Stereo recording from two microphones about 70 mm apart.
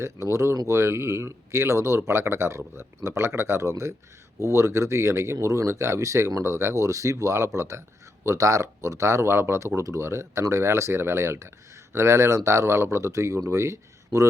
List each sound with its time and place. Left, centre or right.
0.0 s speech: right